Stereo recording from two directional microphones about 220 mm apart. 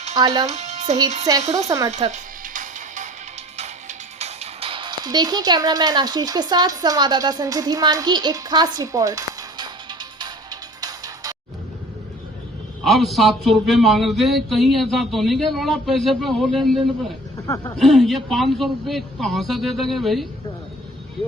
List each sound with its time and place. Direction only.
0.4 s speech: 30° right (ahead or behind)
1.9 s music: 30° right (ahead or behind)
12.8 s a man's voice: centre (ahead or behind)
17.4 s speech: 15° left (ahead or behind)
17.7 s a man's voice: centre (ahead or behind)